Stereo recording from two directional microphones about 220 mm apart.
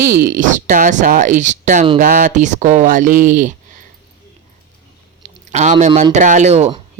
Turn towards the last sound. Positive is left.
turn(degrees=-30)  # may be behind; listen again after turning